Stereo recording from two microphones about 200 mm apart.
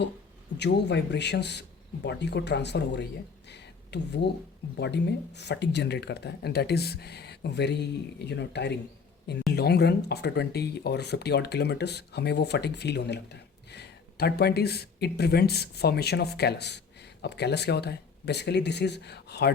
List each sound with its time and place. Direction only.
0.5 s speech: 60° left (ahead or behind)
3.5 s a sound: 55° left (ahead or behind)
4.8 s speech: 60° left (ahead or behind)